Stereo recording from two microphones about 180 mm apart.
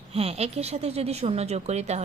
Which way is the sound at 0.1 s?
35° right (ahead or behind).